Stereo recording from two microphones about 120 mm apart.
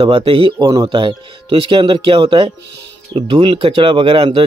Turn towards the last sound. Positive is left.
turn(degrees=-50)  # may be behind; listen again after turning